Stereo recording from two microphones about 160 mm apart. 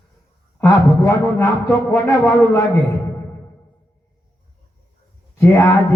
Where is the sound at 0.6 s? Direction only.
15° left (ahead or behind).